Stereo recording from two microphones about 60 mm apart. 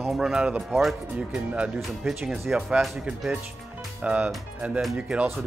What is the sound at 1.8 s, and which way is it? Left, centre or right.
Speech, centre.